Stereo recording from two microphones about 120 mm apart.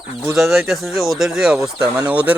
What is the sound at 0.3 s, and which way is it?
Speech, centre (ahead or behind).